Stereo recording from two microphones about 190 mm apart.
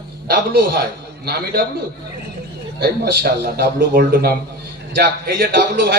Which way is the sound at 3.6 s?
50° right (ahead or behind).